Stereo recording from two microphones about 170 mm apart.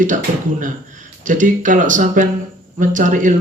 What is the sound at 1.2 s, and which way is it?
Speech, 50° right (ahead or behind).